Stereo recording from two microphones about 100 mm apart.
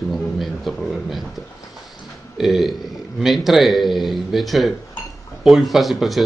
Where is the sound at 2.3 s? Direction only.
Centre (ahead or behind).